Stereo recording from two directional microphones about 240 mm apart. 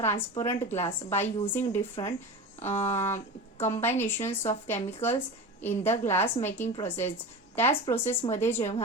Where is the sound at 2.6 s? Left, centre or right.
Left.